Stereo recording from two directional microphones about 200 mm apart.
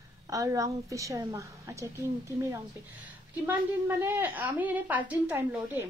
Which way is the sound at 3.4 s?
10° right (ahead or behind).